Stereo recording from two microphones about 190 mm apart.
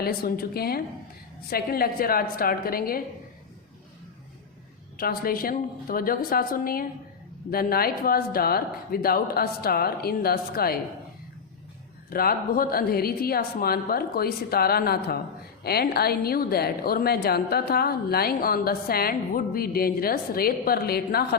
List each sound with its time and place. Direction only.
0.0 s a woman's voice: 55° left (ahead or behind)
4.9 s a woman's voice: 50° left (ahead or behind)
12.1 s a woman's voice: 50° left (ahead or behind)